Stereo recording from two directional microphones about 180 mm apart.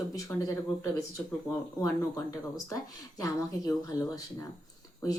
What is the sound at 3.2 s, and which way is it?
Speech, 20° left (ahead or behind).